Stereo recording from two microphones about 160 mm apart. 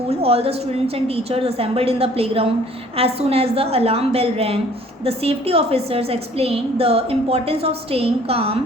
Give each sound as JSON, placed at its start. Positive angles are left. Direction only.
{"t": 0.1, "sound": "a woman's voice", "side_deg": -40}